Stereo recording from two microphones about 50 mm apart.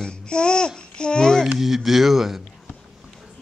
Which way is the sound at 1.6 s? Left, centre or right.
Centre.